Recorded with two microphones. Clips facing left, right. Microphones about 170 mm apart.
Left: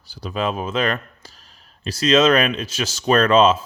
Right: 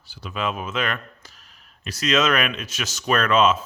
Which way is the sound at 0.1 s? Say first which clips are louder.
Left 4 dB; 35° left (ahead or behind).